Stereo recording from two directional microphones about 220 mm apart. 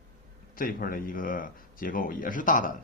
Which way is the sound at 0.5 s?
40° left (ahead or behind).